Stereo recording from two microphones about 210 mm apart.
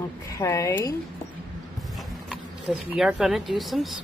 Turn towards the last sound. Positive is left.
turn(degrees=0)  # may be behind; listen again after turning